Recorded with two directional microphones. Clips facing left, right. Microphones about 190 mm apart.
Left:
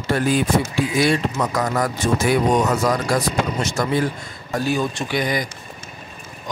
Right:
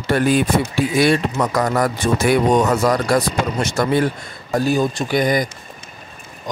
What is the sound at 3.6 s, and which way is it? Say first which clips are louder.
Speech: right 3 dB; 60° right (ahead or behind).